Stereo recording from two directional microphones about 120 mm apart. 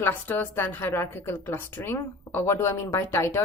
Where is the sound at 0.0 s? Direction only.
15° left (ahead or behind).